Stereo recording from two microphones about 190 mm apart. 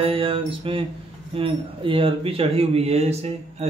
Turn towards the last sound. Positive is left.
turn(degrees=-35)  # may be behind; listen again after turning